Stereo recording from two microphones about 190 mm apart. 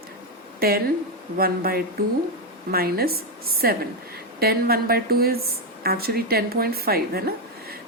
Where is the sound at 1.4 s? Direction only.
50° right (ahead or behind).